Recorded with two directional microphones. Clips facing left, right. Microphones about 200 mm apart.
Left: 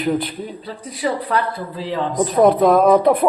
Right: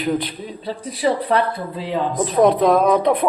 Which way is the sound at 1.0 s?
30° right (ahead or behind).